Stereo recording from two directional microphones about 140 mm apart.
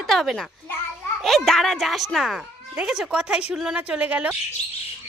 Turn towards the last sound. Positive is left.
turn(degrees=-10)  # may be behind; listen again after turning